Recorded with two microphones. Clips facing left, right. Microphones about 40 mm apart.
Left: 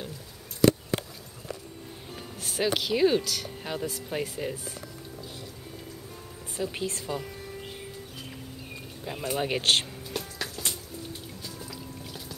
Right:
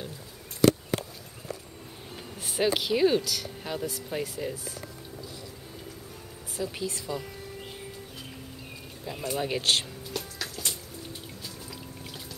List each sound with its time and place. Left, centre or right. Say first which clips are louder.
2.4 s speech: right 1 dB; centre
6.6 s speech: left 1 dB; left
9.0 s speech: left 1 dB; centre
10.4 s music: left 1 dB; centre